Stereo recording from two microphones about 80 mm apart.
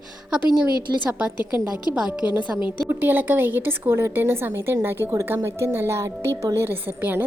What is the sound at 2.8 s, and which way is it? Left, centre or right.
A woman's voice, right.